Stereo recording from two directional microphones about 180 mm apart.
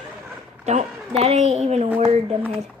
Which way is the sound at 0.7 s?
35° right (ahead or behind).